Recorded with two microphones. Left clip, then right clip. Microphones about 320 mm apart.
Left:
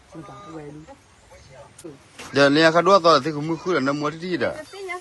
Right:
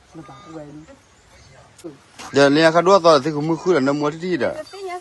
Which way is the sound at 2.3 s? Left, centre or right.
Centre.